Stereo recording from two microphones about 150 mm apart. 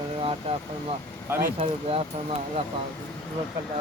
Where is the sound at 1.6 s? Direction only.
45° right (ahead or behind).